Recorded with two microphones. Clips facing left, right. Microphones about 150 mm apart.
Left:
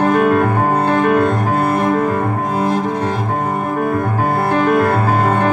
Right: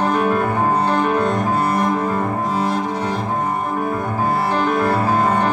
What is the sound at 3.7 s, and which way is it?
Music, 55° left (ahead or behind).